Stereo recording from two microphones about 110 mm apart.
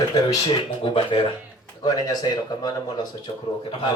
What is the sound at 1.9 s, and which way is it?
Speech, 35° left (ahead or behind).